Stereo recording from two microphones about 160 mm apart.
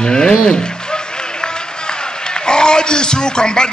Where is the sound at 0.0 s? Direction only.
5° left (ahead or behind).